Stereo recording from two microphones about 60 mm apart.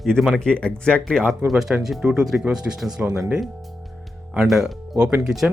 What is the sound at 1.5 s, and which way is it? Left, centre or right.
Speech, centre.